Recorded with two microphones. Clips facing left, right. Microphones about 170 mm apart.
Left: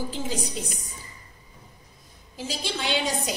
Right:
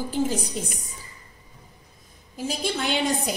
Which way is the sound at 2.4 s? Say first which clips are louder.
Right 4 dB; 55° right (ahead or behind).